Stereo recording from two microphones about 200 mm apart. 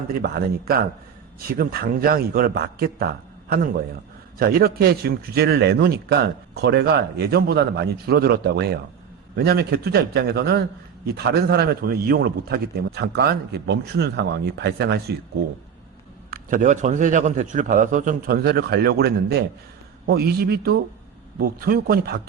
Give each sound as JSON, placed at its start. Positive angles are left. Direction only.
{"t": 0.2, "sound": "a man's voice", "side_deg": -50}
{"t": 16.3, "sound": "a man's voice", "side_deg": -40}